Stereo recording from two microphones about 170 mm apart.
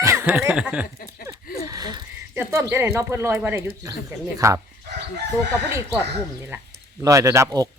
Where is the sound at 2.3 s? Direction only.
15° right (ahead or behind).